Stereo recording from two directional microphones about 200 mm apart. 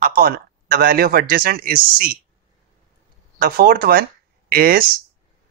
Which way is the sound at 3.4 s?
45° right (ahead or behind).